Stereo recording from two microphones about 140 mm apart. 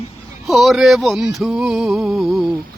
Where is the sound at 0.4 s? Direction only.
Centre (ahead or behind).